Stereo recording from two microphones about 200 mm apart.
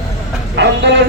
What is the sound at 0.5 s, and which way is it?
Speech, 60° right (ahead or behind).